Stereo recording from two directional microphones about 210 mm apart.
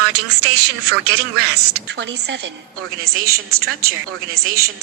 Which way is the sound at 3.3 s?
90° right.